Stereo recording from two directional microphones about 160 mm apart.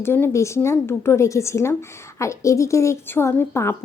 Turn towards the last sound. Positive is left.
turn(degrees=15)  # may be behind; listen again after turning